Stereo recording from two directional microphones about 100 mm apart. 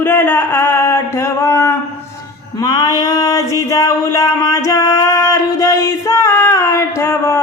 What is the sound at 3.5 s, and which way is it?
Music, 35° left (ahead or behind).